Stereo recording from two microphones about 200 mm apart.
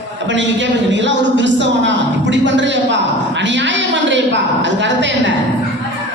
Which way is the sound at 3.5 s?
65° right (ahead or behind).